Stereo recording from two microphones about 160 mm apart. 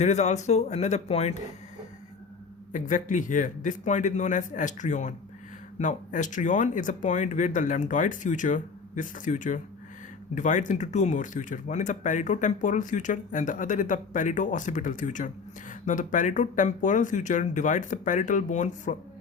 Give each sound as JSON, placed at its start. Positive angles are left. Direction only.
{"t": 0.0, "sound": "speech", "side_deg": 45}
{"t": 2.7, "sound": "speech", "side_deg": 55}